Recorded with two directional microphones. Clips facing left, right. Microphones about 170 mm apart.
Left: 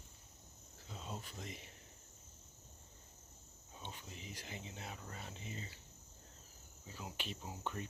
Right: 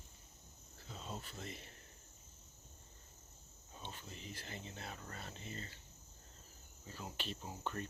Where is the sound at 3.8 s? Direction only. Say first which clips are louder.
Even; 10° left (ahead or behind).